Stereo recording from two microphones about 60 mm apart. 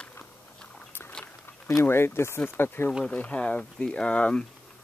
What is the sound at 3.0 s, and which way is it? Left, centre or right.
Speech, left.